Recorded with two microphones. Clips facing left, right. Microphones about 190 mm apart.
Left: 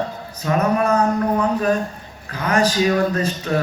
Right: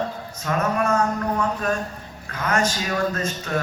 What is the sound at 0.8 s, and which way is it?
A man's voice, 35° left (ahead or behind).